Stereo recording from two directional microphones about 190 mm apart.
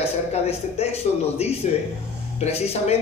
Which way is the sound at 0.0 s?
35° left (ahead or behind).